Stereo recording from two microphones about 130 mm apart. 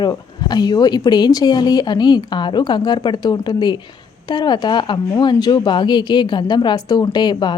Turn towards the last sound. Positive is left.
turn(degrees=35)  # may be behind; listen again after turning